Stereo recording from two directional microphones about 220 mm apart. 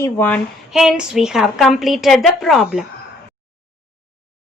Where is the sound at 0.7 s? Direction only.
Centre (ahead or behind).